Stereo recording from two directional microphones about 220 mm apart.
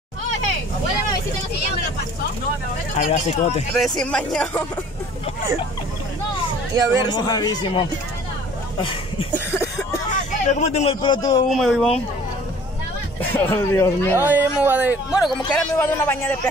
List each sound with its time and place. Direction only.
3.0 s speech: 30° left (ahead or behind)
3.7 s speech: centre (ahead or behind)
6.7 s speech: 15° right (ahead or behind)
7.1 s speech: 15° left (ahead or behind)
10.4 s a man's voice: 30° left (ahead or behind); by 11.4 s 15° left (ahead or behind)
11.5 s speech: centre (ahead or behind)
13.2 s speech: 10° left (ahead or behind)
14.1 s speech: 10° right (ahead or behind)
15.8 s speech: 10° left (ahead or behind)